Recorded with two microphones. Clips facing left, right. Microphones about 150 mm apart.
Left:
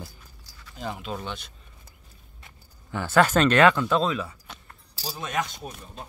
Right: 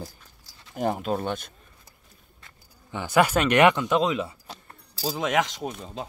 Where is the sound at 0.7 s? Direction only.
50° right (ahead or behind).